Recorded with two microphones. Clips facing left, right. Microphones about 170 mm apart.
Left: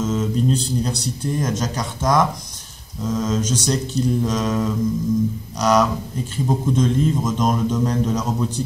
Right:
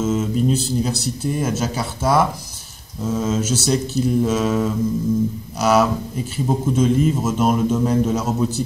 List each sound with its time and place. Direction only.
0.0 s speech: 5° right (ahead or behind)
3.1 s mantra: 5° right (ahead or behind)
6.3 s a man's voice: 5° right (ahead or behind)